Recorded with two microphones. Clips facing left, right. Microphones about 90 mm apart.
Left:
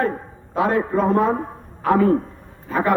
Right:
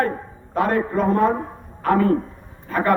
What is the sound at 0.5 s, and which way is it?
A man's voice, 10° left (ahead or behind).